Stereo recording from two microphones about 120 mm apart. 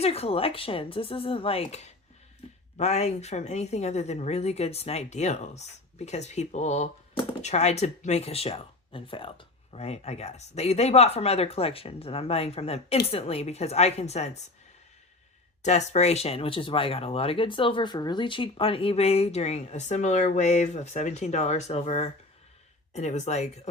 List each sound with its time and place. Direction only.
0.0 s a woman's voice: 55° left (ahead or behind)
2.4 s a sound: 55° left (ahead or behind)
2.7 s speech: 65° left (ahead or behind)
15.6 s speech: 70° left (ahead or behind)